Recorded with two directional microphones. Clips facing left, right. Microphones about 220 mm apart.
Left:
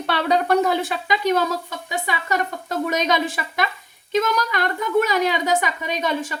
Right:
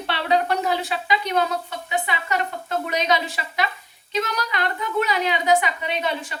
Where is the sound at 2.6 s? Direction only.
45° left (ahead or behind).